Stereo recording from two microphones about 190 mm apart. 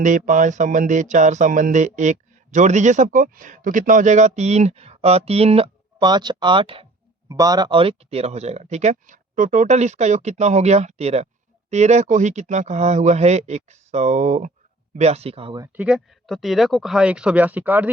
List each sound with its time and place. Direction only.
0.0 s speech: 40° right (ahead or behind)
15.6 s speech: 10° right (ahead or behind)